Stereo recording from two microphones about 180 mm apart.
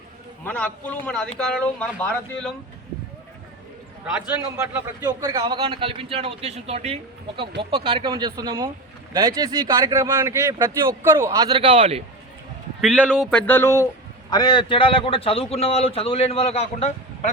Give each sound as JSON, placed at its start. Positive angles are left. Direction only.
{"t": 0.4, "sound": "a man's voice", "side_deg": 10}
{"t": 4.5, "sound": "speech", "side_deg": -20}
{"t": 12.8, "sound": "speech", "side_deg": -5}
{"t": 13.5, "sound": "a man's voice", "side_deg": 15}